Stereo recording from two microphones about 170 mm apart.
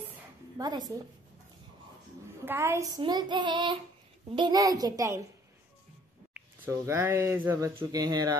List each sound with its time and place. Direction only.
0.6 s a woman's voice: 25° right (ahead or behind)
2.4 s a woman's voice: 15° right (ahead or behind)
6.6 s speech: 15° right (ahead or behind)